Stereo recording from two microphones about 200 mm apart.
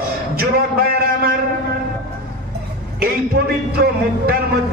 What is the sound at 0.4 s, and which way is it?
Speech, 50° right (ahead or behind).